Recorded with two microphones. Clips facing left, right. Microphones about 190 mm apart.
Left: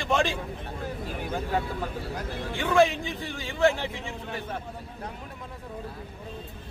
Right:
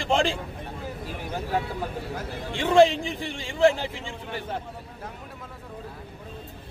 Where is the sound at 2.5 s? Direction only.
30° right (ahead or behind).